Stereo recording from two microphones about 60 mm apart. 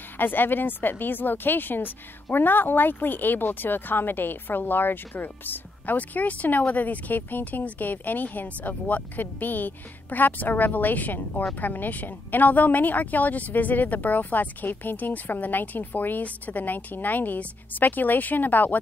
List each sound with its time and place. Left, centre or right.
0.2 s speech: left